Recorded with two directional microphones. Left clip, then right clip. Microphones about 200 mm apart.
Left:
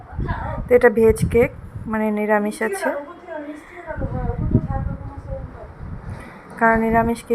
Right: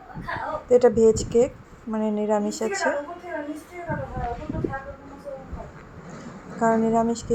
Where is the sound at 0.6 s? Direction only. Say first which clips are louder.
Left 3 dB; 10° left (ahead or behind).